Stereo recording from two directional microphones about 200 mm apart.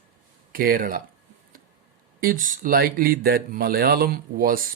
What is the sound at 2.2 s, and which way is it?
Speech, 45° right (ahead or behind).